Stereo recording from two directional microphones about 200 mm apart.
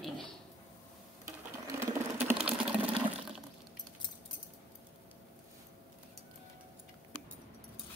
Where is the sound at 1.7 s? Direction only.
10° right (ahead or behind).